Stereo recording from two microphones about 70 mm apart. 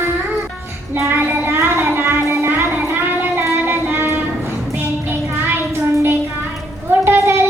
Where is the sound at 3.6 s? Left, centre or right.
Right.